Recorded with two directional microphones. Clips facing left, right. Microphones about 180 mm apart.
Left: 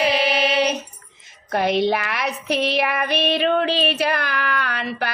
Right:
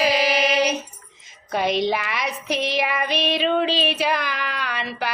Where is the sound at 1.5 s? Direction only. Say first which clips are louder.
Left 2 dB; 60° left (ahead or behind).